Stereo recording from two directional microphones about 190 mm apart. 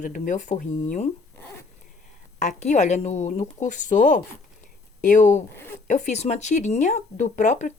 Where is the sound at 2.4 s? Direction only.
40° left (ahead or behind).